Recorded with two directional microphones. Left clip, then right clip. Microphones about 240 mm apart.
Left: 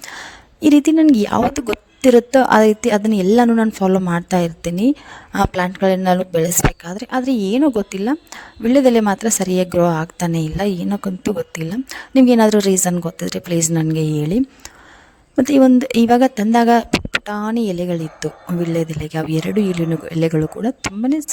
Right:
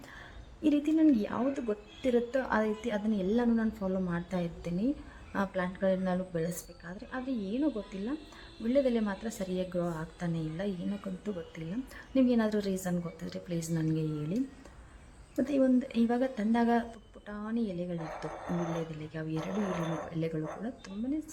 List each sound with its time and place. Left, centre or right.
0.0 s a woman's voice: left
15.4 s a woman's voice: left